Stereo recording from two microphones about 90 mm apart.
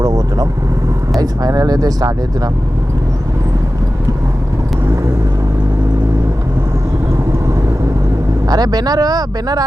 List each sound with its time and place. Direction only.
0.0 s vehicle: 45° right (ahead or behind)
1.2 s speech: 45° right (ahead or behind)
8.4 s speech: 45° right (ahead or behind)